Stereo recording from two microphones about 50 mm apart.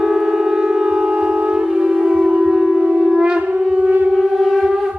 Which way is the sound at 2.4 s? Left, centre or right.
Centre.